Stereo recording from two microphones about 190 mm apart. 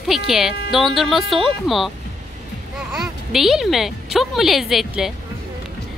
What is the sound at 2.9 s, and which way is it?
A woman's voice, centre (ahead or behind).